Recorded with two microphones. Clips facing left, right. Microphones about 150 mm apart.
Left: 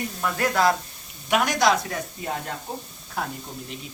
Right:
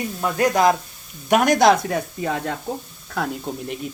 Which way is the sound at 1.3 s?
50° right (ahead or behind).